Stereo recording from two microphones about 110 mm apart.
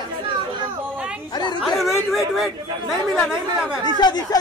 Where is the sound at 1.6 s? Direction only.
Centre (ahead or behind).